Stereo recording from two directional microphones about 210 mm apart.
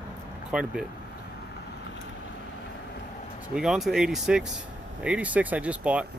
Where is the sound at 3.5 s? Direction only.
Centre (ahead or behind).